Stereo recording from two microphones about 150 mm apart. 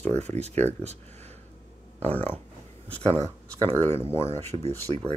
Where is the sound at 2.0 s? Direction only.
10° left (ahead or behind).